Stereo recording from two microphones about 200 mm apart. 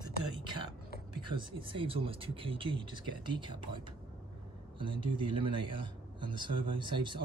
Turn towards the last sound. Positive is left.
turn(degrees=-25)  # may be behind; listen again after turning